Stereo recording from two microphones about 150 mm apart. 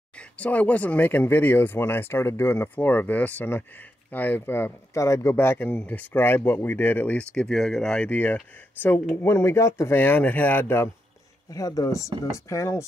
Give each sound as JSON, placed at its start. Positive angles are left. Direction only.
{"t": 0.4, "sound": "speech", "side_deg": 10}